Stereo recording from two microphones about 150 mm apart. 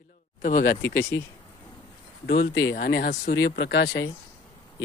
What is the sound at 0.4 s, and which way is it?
Speech, 65° left (ahead or behind).